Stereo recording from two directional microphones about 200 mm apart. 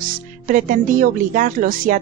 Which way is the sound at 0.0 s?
45° right (ahead or behind).